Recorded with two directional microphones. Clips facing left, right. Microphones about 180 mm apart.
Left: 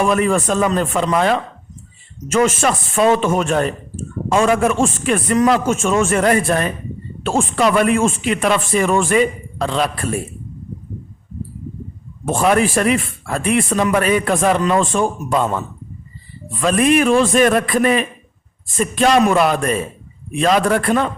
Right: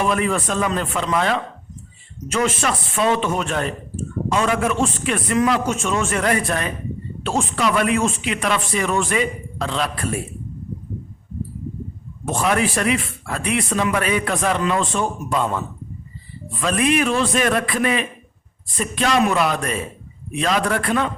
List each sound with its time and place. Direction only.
0.0 s a man's voice: 45° left (ahead or behind)
12.2 s a man's voice: 50° left (ahead or behind)
16.6 s a man's voice: 45° left (ahead or behind)